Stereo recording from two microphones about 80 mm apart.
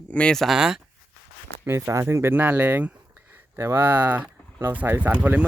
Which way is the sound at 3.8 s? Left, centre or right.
Centre.